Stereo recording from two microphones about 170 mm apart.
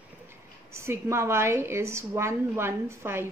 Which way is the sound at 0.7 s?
15° right (ahead or behind).